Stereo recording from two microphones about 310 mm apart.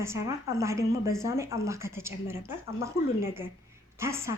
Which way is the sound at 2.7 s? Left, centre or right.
Left.